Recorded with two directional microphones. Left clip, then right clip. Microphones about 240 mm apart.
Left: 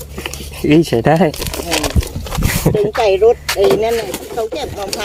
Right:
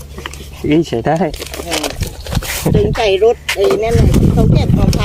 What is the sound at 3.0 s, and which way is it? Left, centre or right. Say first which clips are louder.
Speech: left 1 dB; right.